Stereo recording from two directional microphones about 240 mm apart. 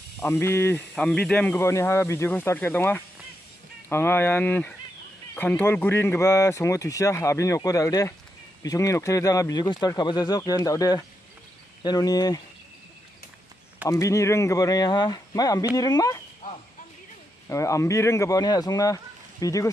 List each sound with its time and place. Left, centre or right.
0.2 s speech: centre
13.8 s speech: centre
17.5 s speech: centre